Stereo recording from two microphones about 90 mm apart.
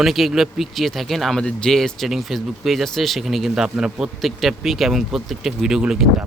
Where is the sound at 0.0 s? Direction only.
5° right (ahead or behind).